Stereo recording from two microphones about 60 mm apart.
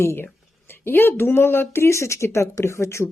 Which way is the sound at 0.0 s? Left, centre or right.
Left.